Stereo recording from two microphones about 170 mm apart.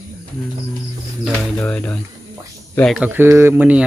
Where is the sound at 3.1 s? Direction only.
15° right (ahead or behind).